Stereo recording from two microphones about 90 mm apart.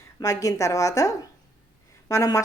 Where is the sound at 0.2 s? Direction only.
40° left (ahead or behind).